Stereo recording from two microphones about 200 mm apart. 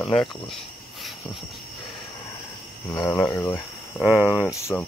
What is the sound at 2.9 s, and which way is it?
Speech, 15° left (ahead or behind).